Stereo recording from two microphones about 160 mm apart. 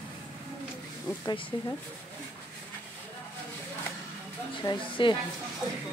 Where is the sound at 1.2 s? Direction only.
20° left (ahead or behind).